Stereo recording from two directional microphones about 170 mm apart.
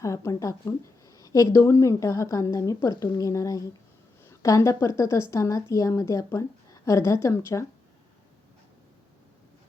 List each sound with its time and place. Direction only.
0.0 s a woman's voice: 20° left (ahead or behind)